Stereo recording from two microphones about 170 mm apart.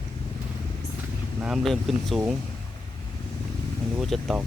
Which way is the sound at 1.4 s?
Centre (ahead or behind).